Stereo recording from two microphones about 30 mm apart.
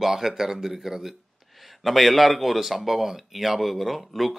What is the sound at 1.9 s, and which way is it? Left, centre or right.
Speech, centre.